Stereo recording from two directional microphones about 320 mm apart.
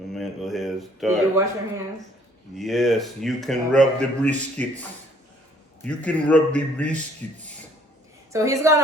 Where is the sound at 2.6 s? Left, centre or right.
Centre.